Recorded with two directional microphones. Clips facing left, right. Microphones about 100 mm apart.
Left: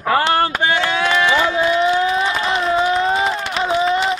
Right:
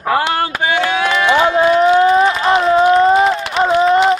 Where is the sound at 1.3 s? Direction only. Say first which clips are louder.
Right 5 dB; 55° right (ahead or behind).